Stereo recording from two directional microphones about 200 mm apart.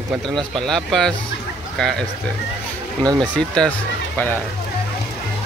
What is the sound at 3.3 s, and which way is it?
Speech, 5° left (ahead or behind).